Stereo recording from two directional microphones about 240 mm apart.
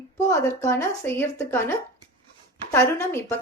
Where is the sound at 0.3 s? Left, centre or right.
Centre.